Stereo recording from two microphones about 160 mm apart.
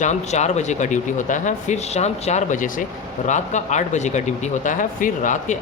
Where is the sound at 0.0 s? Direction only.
45° left (ahead or behind).